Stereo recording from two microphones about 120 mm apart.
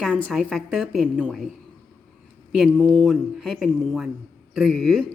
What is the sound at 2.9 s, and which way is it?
Speech, centre (ahead or behind).